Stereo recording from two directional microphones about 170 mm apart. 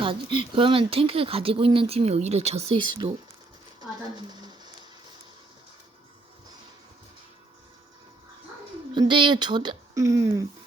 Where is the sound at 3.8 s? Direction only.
25° right (ahead or behind).